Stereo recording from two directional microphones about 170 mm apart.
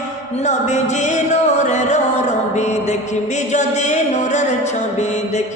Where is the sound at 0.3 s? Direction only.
40° left (ahead or behind).